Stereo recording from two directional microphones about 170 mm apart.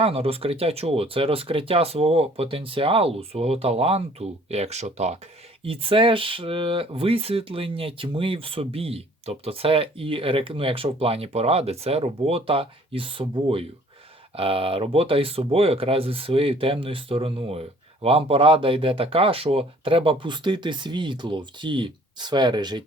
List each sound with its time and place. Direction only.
0.0 s speech: 35° right (ahead or behind)